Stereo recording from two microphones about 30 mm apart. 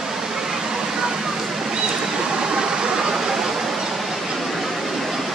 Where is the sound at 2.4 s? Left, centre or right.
Right.